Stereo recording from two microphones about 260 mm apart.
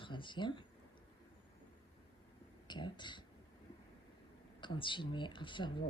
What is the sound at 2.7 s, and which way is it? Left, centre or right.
Speech, centre.